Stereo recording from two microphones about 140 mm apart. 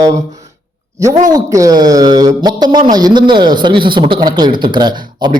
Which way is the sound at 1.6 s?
25° right (ahead or behind).